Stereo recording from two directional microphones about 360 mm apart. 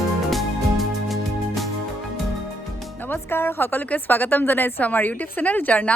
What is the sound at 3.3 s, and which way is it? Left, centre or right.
A woman's voice, centre.